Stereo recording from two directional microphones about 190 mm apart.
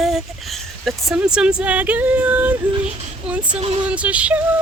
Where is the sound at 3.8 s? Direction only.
5° right (ahead or behind).